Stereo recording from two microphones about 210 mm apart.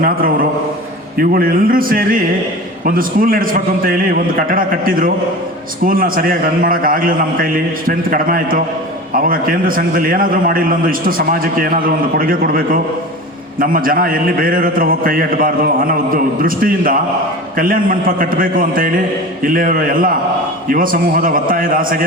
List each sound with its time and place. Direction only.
1.1 s a man's voice: 45° right (ahead or behind)